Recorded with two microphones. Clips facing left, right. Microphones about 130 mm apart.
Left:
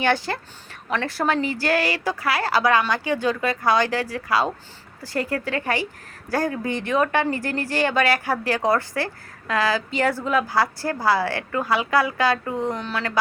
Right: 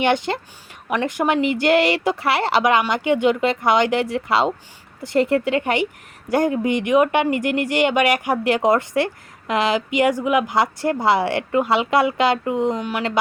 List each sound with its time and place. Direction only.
0.0 s a woman's voice: 20° right (ahead or behind)